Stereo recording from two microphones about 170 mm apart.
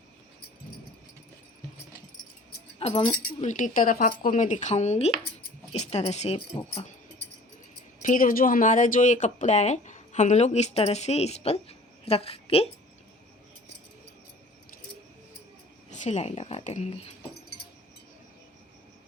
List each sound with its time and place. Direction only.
2.7 s speech: 30° left (ahead or behind)
3.4 s a woman's voice: 45° left (ahead or behind)
8.0 s speech: 55° left (ahead or behind); by 12.6 s 35° left (ahead or behind)
15.9 s speech: 45° left (ahead or behind)